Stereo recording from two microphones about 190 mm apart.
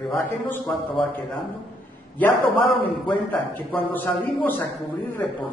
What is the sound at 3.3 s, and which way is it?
A man's voice, 10° left (ahead or behind).